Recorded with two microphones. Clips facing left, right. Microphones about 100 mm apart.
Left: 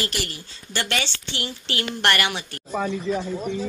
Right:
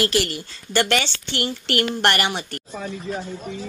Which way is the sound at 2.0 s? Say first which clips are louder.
Left 2 dB; 35° right (ahead or behind).